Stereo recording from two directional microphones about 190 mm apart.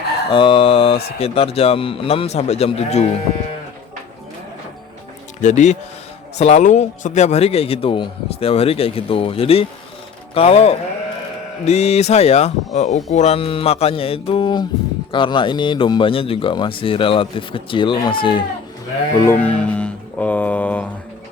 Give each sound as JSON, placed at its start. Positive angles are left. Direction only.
{"t": 0.3, "sound": "a man's voice", "side_deg": 25}
{"t": 5.4, "sound": "a man's voice", "side_deg": 40}
{"t": 19.2, "sound": "music", "side_deg": 10}